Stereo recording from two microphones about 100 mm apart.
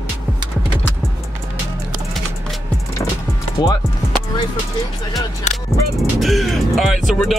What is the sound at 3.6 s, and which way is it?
Speech, 55° left (ahead or behind).